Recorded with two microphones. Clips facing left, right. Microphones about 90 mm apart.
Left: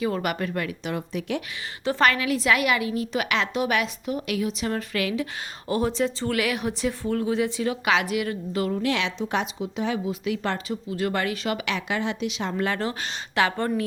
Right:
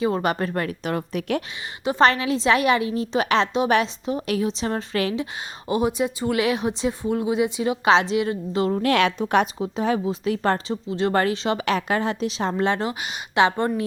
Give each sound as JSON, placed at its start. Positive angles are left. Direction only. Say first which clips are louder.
{"t": 0.0, "sound": "a woman's voice", "louder": "right 4 dB", "side_deg": -30}
{"t": 1.8, "sound": "a woman's voice", "louder": "right 3 dB", "side_deg": -20}
{"t": 8.7, "sound": "a woman's voice", "louder": "right 6 dB", "side_deg": -50}
{"t": 9.6, "sound": "a woman's voice", "louder": "right 4 dB", "side_deg": -40}